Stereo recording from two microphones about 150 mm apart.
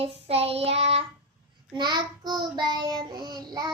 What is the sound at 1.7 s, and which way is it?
Child singing, 30° right (ahead or behind).